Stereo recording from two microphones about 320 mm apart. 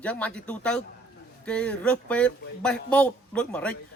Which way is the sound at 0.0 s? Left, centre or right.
Centre.